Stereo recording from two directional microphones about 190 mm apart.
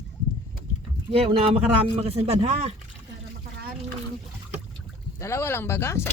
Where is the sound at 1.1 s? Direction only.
30° right (ahead or behind).